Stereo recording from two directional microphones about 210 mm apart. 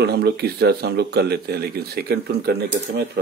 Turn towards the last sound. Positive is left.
turn(degrees=-50)  # may be behind; listen again after turning